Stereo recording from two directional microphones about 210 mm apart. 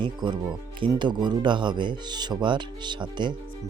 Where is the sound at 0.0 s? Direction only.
20° right (ahead or behind).